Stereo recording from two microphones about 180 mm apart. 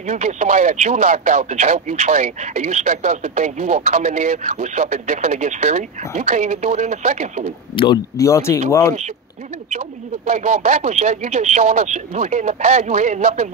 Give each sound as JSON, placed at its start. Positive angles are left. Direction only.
{"t": 0.1, "sound": "speech", "side_deg": -40}
{"t": 7.7, "sound": "speech", "side_deg": 25}
{"t": 10.2, "sound": "speech", "side_deg": -40}